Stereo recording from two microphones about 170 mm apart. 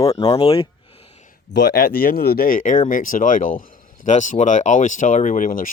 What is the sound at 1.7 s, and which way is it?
Speech, 60° left (ahead or behind).